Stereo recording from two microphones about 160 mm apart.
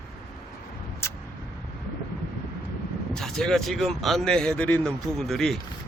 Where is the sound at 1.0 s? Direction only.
15° left (ahead or behind).